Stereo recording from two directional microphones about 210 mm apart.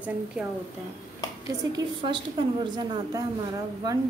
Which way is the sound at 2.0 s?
25° right (ahead or behind).